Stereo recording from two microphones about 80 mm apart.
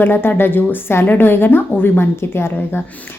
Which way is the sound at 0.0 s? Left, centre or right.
Left.